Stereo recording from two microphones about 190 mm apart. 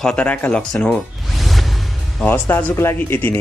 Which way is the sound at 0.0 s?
5° left (ahead or behind).